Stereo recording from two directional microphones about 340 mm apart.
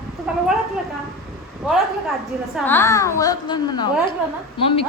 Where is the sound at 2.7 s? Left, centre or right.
Centre.